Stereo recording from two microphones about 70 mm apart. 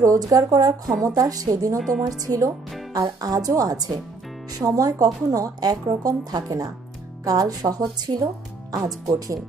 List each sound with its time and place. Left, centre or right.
0.0 s a woman's voice: right
1.8 s speech: centre
2.0 s a woman's voice: right